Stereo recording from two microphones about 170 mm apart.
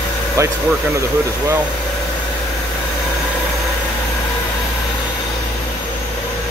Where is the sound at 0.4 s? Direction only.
15° right (ahead or behind).